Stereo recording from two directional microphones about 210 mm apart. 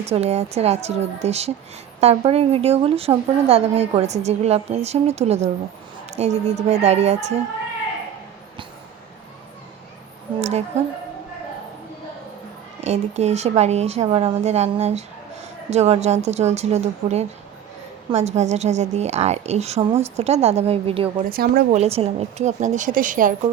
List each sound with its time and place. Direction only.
0.0 s a woman's voice: 30° right (ahead or behind)
12.8 s a woman's voice: 30° right (ahead or behind)
21.2 s a woman's voice: 45° right (ahead or behind)
21.8 s a woman's voice: 30° right (ahead or behind)